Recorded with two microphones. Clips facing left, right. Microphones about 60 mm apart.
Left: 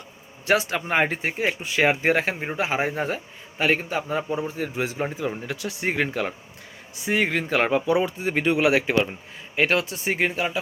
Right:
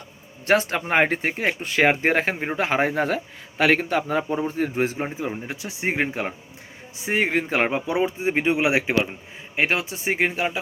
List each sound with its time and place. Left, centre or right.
0.4 s speech: right
4.9 s speech: right